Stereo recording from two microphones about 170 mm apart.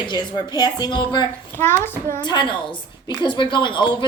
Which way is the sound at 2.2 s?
25° left (ahead or behind).